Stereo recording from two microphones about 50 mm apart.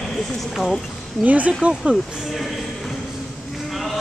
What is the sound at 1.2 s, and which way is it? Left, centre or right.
Speech, right.